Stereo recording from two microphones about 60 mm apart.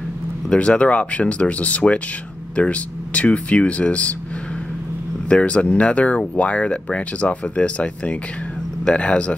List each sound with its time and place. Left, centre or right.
0.5 s speech: centre
5.3 s speech: left